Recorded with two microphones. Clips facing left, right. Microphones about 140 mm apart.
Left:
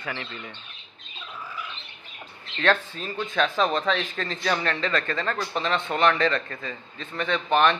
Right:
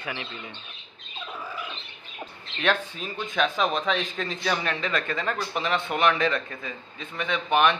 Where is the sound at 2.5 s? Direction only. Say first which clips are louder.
Left 2 dB; 10° right (ahead or behind).